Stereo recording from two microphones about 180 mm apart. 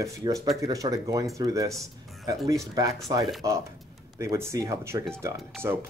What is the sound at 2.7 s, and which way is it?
Speech, 20° right (ahead or behind).